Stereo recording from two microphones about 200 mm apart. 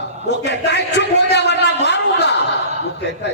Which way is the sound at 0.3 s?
60° left (ahead or behind).